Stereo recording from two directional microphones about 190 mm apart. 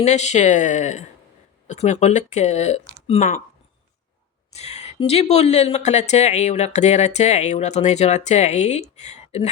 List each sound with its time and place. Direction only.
0.0 s speech: 35° left (ahead or behind)
4.5 s speech: 35° left (ahead or behind)